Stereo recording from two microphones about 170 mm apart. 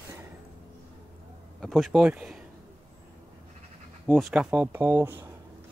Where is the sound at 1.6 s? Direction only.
Centre (ahead or behind).